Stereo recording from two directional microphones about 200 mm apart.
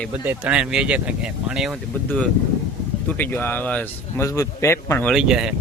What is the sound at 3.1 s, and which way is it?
Speech, 10° left (ahead or behind).